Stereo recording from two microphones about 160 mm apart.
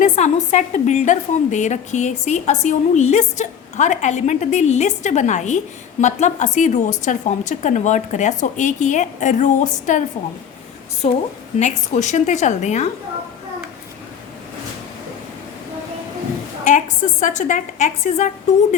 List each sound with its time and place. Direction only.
0.0 s a woman's voice: 45° left (ahead or behind)
11.0 s a woman's voice: 40° left (ahead or behind)
16.6 s a woman's voice: 50° left (ahead or behind)